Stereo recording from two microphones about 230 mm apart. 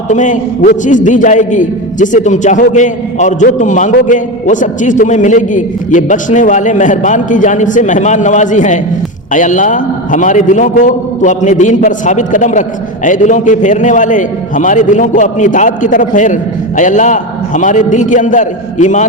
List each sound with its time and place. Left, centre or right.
0.1 s a man's voice: left